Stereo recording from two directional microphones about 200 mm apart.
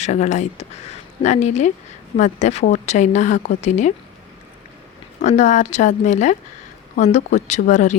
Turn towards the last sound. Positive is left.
turn(degrees=35)  # may be behind; listen again after turning